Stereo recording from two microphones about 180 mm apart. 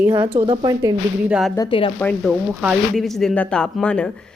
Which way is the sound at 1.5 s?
30° left (ahead or behind).